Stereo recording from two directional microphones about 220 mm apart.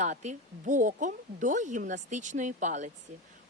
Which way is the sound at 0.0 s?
30° right (ahead or behind).